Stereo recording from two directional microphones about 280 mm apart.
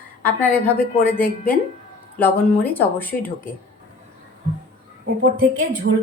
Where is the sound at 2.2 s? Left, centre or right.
Centre.